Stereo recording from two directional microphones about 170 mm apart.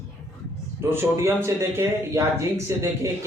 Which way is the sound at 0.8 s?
15° right (ahead or behind).